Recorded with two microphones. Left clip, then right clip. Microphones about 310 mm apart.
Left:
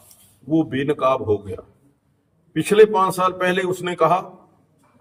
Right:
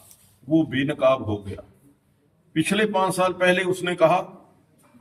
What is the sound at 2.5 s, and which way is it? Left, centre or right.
A man's voice, centre.